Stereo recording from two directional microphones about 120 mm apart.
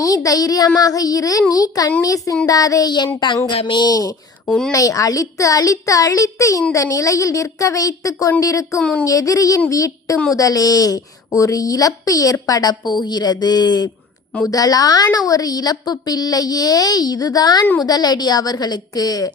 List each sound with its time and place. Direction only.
0.0 s a child's voice: 30° left (ahead or behind)
4.4 s speech: 5° left (ahead or behind)
4.7 s a child's voice: 30° left (ahead or behind)
8.8 s speech: 10° left (ahead or behind)
9.0 s a child's voice: 30° left (ahead or behind)